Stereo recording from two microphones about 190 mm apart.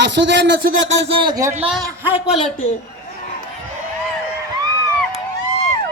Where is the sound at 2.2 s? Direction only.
40° left (ahead or behind).